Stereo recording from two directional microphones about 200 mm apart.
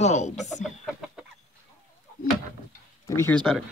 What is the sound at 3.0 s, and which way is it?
Speech, 15° left (ahead or behind).